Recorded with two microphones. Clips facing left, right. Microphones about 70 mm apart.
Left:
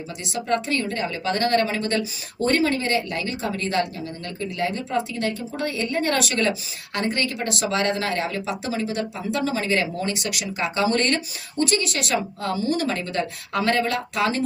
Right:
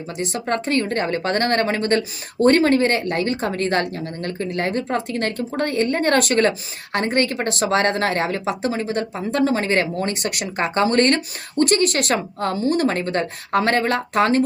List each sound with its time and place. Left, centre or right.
0.2 s speech: right